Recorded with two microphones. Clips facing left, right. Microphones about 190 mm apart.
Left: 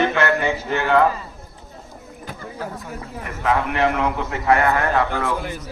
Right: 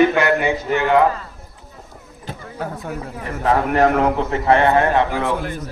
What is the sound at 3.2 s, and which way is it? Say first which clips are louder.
A man's voice: right 3 dB; 35° right (ahead or behind).